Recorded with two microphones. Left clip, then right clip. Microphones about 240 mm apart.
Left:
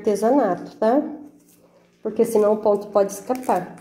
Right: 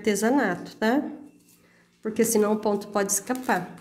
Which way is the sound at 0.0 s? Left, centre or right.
Right.